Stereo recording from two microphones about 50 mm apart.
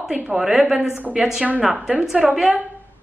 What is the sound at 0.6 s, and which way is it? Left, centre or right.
Speech, right.